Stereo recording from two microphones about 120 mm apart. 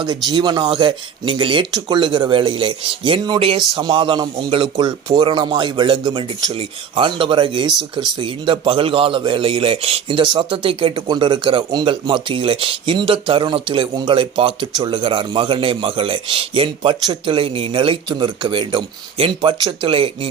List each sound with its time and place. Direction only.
0.0 s a man's voice: 35° right (ahead or behind)